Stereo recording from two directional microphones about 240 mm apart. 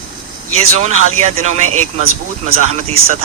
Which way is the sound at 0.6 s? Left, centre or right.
Right.